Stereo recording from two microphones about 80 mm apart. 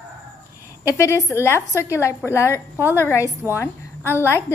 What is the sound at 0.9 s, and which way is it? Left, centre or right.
Speech, left.